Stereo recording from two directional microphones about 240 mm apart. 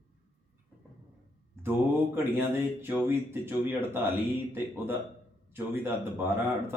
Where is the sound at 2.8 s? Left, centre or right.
Centre.